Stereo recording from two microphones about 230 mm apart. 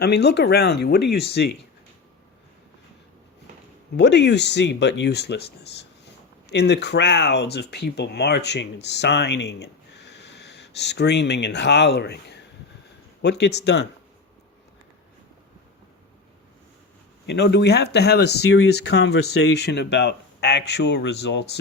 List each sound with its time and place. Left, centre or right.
0.0 s speech: left
3.9 s speech: left
17.2 s speech: left